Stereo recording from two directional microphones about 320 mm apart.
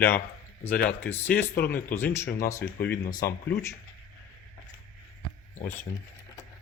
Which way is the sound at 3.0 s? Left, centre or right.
Left.